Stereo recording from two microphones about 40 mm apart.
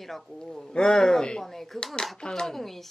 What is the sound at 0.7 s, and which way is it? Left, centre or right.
Speech, centre.